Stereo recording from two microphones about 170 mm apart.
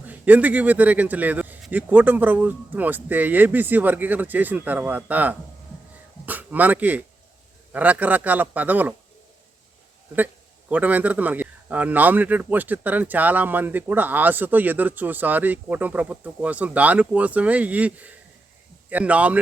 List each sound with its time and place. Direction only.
0.0 s a man's voice: 10° right (ahead or behind)
10.7 s a man's voice: 10° right (ahead or behind)